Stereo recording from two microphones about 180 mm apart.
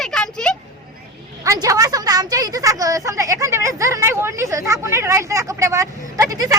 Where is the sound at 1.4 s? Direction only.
20° right (ahead or behind).